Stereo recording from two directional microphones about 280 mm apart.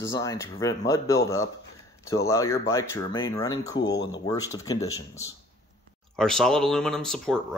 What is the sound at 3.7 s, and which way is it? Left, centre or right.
Speech, left.